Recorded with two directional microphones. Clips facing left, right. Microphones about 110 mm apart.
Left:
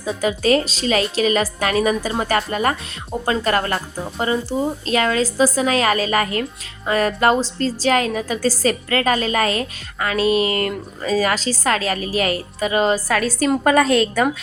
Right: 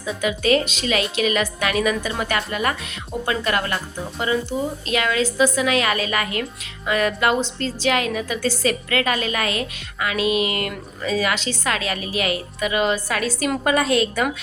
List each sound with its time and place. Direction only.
0.0 s a woman's voice: 35° left (ahead or behind)